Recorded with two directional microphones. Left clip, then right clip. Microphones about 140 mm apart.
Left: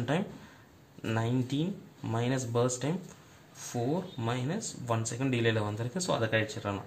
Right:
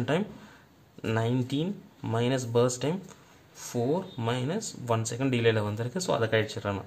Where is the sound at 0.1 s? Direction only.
35° right (ahead or behind).